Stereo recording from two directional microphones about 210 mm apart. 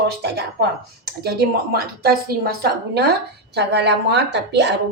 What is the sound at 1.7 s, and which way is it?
Speech, 45° right (ahead or behind).